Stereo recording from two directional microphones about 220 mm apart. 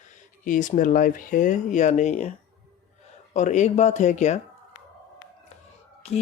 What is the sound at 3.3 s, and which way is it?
Speech, 35° left (ahead or behind).